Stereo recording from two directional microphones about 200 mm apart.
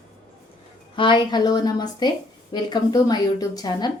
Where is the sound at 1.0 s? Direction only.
25° left (ahead or behind).